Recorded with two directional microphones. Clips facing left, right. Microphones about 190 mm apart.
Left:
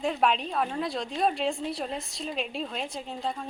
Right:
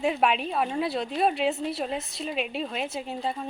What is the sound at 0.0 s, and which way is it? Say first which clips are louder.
A woman's voice: right 2 dB; 5° right (ahead or behind).